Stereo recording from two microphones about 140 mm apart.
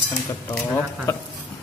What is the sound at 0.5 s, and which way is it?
Speech, 15° left (ahead or behind).